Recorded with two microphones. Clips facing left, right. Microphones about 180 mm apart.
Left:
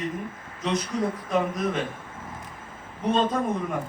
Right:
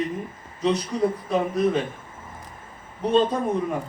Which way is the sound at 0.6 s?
35° right (ahead or behind).